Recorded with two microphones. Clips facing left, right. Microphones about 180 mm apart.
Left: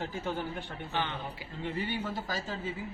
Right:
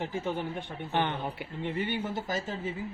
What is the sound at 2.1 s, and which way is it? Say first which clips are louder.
Speech: right 3 dB; 20° right (ahead or behind).